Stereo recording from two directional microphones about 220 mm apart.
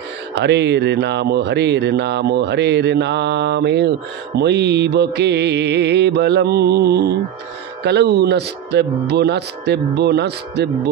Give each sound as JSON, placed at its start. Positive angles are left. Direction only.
{"t": 0.3, "sound": "speech", "side_deg": -50}